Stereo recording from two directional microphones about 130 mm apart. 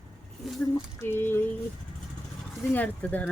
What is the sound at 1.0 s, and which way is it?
Speech, 20° left (ahead or behind).